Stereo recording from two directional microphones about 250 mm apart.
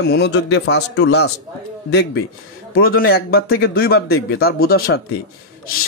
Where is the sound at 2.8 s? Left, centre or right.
Left.